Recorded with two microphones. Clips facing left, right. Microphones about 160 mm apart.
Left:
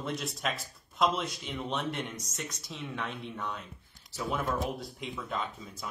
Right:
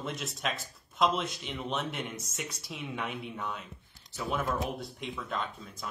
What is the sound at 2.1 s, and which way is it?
Speech, 30° right (ahead or behind).